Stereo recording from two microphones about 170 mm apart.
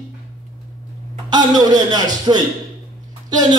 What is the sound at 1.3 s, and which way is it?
A man's voice, 25° right (ahead or behind).